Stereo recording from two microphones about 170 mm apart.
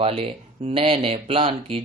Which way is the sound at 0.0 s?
35° right (ahead or behind).